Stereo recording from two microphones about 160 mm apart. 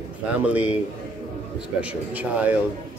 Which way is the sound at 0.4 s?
10° right (ahead or behind).